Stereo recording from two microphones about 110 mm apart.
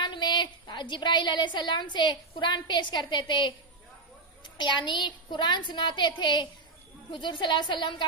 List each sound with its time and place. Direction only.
0.0 s a woman's voice: 45° left (ahead or behind)